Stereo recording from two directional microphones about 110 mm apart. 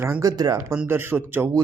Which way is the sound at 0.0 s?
25° right (ahead or behind).